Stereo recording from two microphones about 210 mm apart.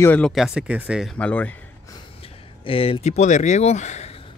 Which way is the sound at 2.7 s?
25° left (ahead or behind).